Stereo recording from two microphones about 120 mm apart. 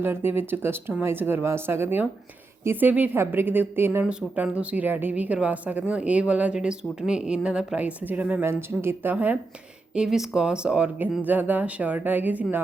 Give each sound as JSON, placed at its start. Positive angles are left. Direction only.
{"t": 0.0, "sound": "speech", "side_deg": -20}
{"t": 4.0, "sound": "speech", "side_deg": -10}